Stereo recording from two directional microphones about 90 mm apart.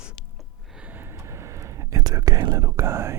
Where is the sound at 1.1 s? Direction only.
30° right (ahead or behind).